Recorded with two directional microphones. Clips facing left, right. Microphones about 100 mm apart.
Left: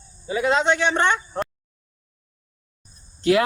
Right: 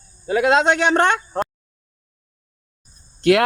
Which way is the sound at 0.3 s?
65° right (ahead or behind).